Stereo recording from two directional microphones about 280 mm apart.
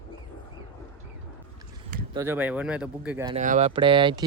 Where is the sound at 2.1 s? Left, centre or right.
Centre.